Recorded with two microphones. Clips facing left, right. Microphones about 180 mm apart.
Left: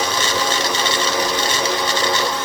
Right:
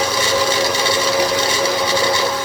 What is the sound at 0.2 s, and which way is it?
Wood, 10° right (ahead or behind).